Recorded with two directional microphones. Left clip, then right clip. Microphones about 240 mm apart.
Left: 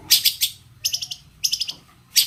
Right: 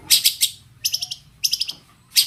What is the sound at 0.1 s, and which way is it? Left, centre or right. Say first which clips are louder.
Bird: right 1 dB; centre.